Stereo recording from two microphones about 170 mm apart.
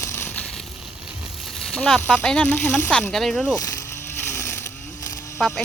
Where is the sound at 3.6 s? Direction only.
20° left (ahead or behind).